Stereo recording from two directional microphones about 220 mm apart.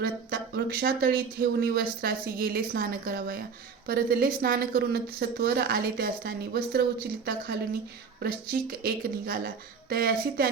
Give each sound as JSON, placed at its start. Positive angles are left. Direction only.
{"t": 0.0, "sound": "speech", "side_deg": -45}